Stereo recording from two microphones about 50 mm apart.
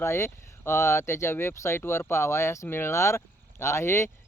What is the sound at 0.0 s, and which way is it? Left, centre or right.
Speech, left.